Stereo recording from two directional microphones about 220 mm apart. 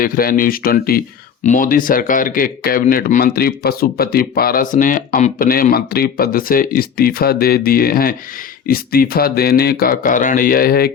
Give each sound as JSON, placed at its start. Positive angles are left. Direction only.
{"t": 0.0, "sound": "speech", "side_deg": 40}